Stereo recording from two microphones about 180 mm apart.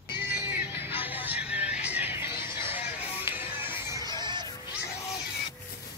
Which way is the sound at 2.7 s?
35° left (ahead or behind).